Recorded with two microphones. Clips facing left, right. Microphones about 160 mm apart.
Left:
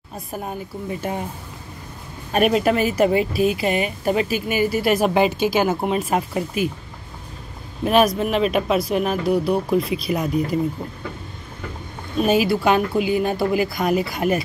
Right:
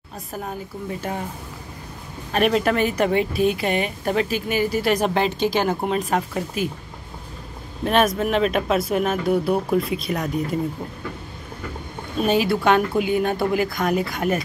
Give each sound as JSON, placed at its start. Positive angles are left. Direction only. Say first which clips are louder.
{"t": 2.3, "sound": "speech", "louder": "left 2 dB", "side_deg": 10}
{"t": 7.8, "sound": "speech", "louder": "left 2 dB", "side_deg": 5}
{"t": 12.3, "sound": "speech", "louder": "left 1 dB", "side_deg": 5}